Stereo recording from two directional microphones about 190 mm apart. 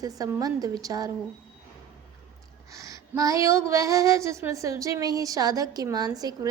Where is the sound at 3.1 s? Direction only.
15° right (ahead or behind).